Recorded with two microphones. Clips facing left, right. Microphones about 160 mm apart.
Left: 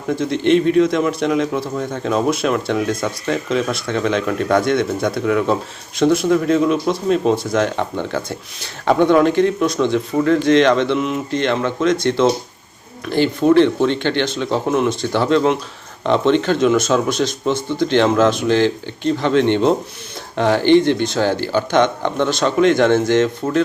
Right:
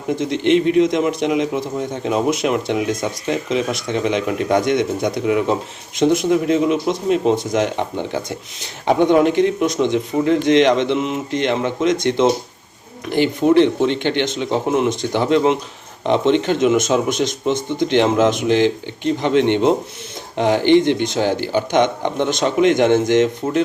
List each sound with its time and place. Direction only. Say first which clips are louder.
0.1 s speech: left 1 dB; 15° right (ahead or behind)